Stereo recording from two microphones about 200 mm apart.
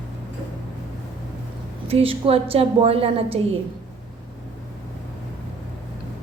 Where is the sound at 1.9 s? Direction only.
30° right (ahead or behind).